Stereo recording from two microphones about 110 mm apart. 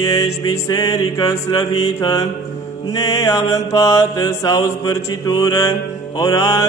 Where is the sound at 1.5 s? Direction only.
40° left (ahead or behind).